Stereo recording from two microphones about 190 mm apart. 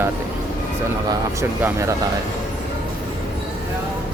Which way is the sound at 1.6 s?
15° right (ahead or behind).